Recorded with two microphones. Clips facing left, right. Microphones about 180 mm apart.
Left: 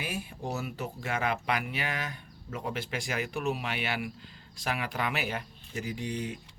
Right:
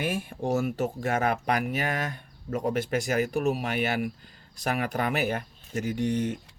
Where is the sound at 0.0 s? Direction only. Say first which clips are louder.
Right 7 dB; 50° right (ahead or behind).